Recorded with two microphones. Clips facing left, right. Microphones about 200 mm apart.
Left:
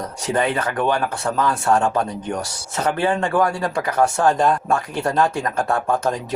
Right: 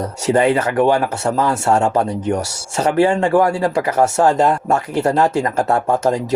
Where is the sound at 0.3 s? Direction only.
25° right (ahead or behind).